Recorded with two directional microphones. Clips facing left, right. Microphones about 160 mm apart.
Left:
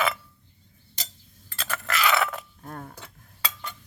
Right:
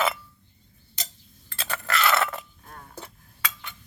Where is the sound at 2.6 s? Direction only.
45° left (ahead or behind).